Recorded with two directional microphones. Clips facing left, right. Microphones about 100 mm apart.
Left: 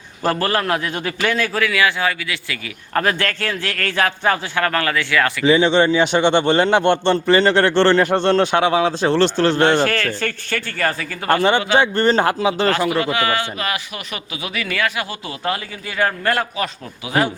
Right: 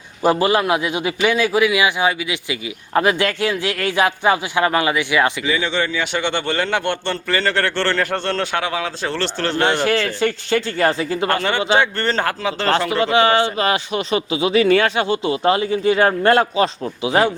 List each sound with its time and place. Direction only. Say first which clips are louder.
0.2 s a man's voice: right 3 dB; 15° right (ahead or behind)
5.5 s a man's voice: left 7 dB; 25° left (ahead or behind)
9.8 s a man's voice: right 2 dB; 15° right (ahead or behind)
11.8 s speech: left 3 dB; 15° left (ahead or behind)
12.9 s a man's voice: right 4 dB; 25° right (ahead or behind)